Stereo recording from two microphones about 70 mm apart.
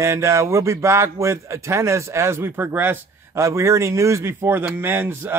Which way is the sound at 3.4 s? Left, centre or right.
Right.